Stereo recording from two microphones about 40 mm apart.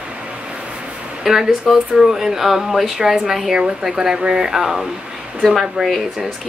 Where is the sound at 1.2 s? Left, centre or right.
Centre.